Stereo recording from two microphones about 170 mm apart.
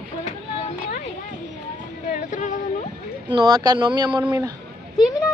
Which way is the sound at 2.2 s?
45° left (ahead or behind).